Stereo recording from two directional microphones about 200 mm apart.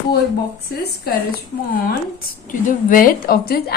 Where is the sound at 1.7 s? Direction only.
45° left (ahead or behind).